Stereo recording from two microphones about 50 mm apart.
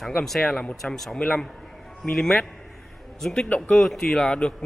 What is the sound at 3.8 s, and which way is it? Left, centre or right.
Speech, centre.